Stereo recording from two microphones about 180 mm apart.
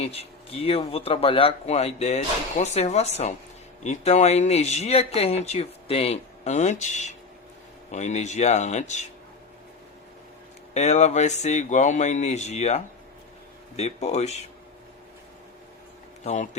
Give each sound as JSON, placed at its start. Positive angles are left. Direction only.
{"t": 0.0, "sound": "speech", "side_deg": 35}
{"t": 10.8, "sound": "speech", "side_deg": 40}
{"t": 16.2, "sound": "speech", "side_deg": 40}